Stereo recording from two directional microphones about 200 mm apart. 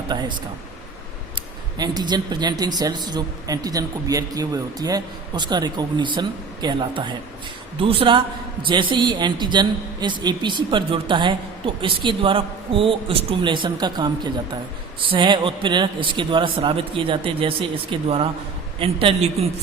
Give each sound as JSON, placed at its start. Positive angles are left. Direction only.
{"t": 0.1, "sound": "a woman's voice", "side_deg": -20}
{"t": 1.8, "sound": "a woman's voice", "side_deg": -20}